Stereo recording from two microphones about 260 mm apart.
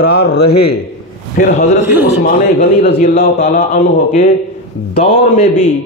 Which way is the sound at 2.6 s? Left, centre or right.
Left.